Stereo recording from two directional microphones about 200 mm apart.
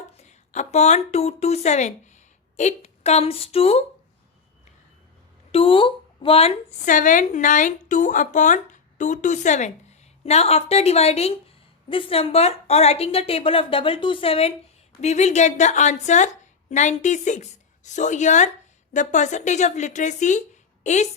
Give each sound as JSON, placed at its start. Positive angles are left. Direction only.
{"t": 0.2, "sound": "speech", "side_deg": 35}
{"t": 5.5, "sound": "a woman's voice", "side_deg": 30}